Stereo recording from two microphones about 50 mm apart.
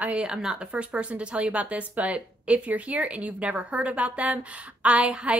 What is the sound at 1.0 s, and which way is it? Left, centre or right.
Speech, right.